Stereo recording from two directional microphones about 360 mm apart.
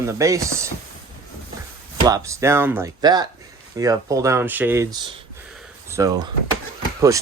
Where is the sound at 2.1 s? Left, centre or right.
Centre.